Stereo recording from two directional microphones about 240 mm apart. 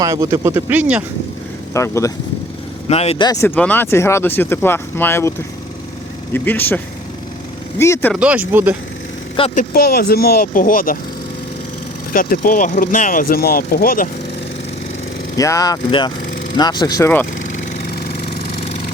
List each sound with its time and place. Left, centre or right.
0.0 s speech: centre
1.7 s speech: centre
2.9 s speech: left; by 5.3 s centre
6.3 s speech: centre
8.1 s speech: centre
9.3 s speech: left
9.7 s speech: left
12.1 s speech: left
15.4 s speech: centre